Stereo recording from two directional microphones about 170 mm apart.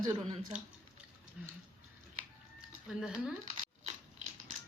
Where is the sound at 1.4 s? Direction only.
5° right (ahead or behind).